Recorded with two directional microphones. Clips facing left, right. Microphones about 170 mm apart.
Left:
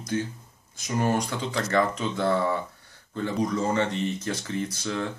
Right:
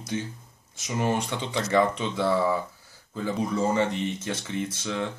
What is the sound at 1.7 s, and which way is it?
Speech, 5° right (ahead or behind).